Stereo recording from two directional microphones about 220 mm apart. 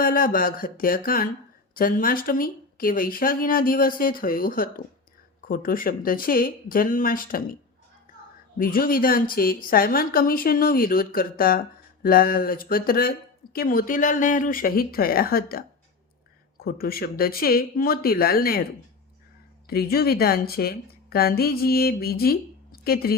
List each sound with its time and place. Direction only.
0.0 s a woman's voice: 40° left (ahead or behind)
8.5 s a woman's voice: 40° left (ahead or behind)
19.6 s a woman's voice: 45° left (ahead or behind)